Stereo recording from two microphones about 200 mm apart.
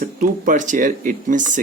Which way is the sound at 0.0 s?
40° right (ahead or behind).